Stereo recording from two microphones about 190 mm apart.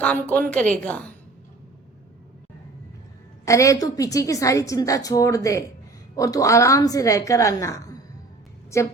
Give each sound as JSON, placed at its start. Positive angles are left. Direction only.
{"t": 0.0, "sound": "a woman's voice", "side_deg": 5}
{"t": 3.4, "sound": "a woman's voice", "side_deg": 15}